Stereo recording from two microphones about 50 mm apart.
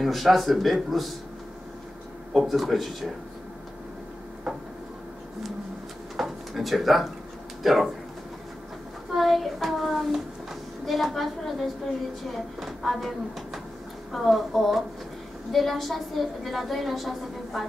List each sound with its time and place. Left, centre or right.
0.0 s a woman's voice: centre
2.3 s a woman's voice: centre
6.1 s drawer open or close: centre
7.6 s a woman's voice: centre
9.1 s a woman's voice: centre